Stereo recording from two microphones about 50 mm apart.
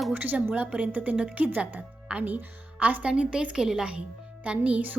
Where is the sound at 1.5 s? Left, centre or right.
Right.